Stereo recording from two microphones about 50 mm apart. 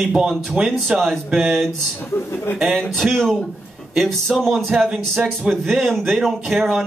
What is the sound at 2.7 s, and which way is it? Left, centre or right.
Speech, centre.